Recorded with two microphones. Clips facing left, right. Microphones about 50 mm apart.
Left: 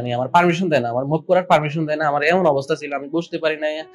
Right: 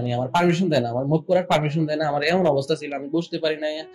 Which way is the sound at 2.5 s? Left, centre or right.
Left.